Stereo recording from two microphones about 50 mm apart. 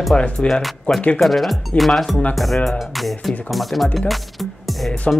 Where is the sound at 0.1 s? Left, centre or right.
Left.